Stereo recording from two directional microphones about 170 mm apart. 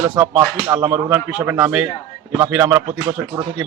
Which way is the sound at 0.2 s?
15° right (ahead or behind).